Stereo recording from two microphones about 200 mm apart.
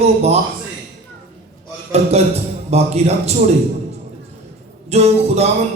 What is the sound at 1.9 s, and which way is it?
A man's voice, 30° right (ahead or behind).